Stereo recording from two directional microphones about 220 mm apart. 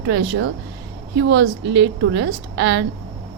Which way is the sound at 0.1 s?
55° right (ahead or behind).